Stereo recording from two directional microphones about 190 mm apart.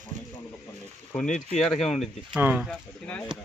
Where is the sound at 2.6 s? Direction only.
5° left (ahead or behind).